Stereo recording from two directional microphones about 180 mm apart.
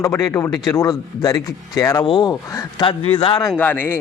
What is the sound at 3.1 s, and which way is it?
Speech, 30° left (ahead or behind).